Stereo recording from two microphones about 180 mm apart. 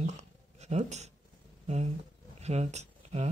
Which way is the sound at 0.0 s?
40° right (ahead or behind).